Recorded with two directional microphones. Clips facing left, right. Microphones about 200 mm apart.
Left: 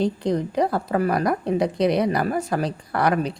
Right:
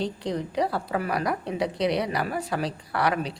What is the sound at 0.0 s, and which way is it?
A woman's voice, 50° left (ahead or behind).